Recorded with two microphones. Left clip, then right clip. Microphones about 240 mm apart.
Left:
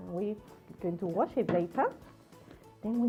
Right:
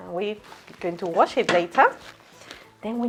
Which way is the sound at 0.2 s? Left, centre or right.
Centre.